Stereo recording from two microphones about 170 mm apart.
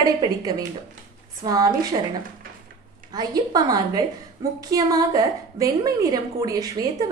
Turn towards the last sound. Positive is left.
turn(degrees=-20)  # may be behind; listen again after turning